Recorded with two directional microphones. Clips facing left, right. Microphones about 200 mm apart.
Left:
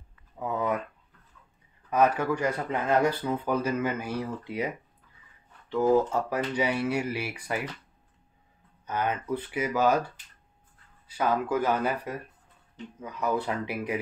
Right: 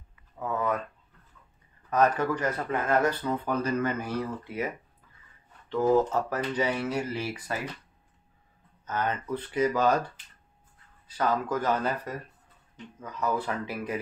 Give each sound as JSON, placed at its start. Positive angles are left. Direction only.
{"t": 0.4, "sound": "a sound", "side_deg": 15}
{"t": 1.9, "sound": "speech", "side_deg": 10}
{"t": 8.8, "sound": "speech", "side_deg": 10}
{"t": 11.1, "sound": "speech", "side_deg": 10}